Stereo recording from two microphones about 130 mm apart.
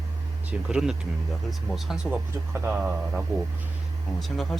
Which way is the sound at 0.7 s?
5° right (ahead or behind).